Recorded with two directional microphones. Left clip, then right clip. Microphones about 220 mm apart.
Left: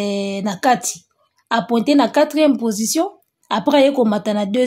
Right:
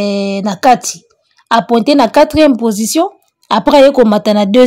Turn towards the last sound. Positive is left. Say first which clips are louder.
# right 10 dB
turn(degrees=-40)  # may be behind; listen again after turning